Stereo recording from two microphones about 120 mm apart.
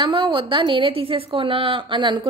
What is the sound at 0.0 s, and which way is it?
A woman's voice, 45° right (ahead or behind).